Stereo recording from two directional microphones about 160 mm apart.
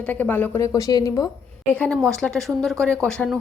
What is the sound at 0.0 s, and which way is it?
Speech, 10° left (ahead or behind).